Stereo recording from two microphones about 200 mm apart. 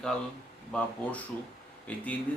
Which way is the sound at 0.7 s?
5° left (ahead or behind).